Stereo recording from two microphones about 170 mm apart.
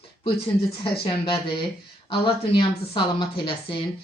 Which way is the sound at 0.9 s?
30° left (ahead or behind).